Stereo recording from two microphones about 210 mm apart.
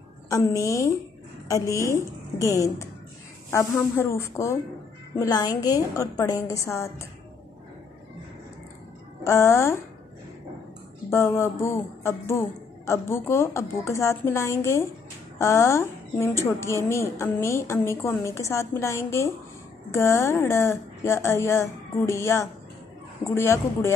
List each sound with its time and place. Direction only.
0.3 s a woman's voice: 15° left (ahead or behind)
9.2 s a woman's voice: 15° left (ahead or behind)
11.1 s a woman's voice: 15° left (ahead or behind)